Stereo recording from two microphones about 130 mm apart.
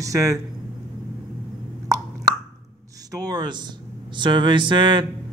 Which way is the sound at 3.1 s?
30° right (ahead or behind).